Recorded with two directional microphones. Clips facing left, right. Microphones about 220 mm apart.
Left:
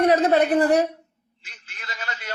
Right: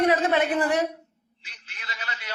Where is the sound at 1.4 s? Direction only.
45° left (ahead or behind).